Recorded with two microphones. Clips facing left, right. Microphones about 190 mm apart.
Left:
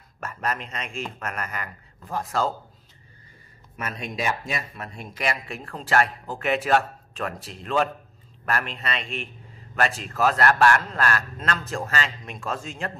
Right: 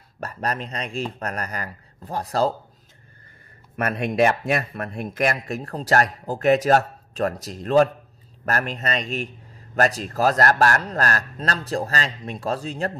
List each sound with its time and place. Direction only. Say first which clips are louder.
0.2 s speech: right 2 dB; 35° right (ahead or behind)
3.7 s speech: right 9 dB; 60° right (ahead or behind); by 12.9 s 35° right (ahead or behind)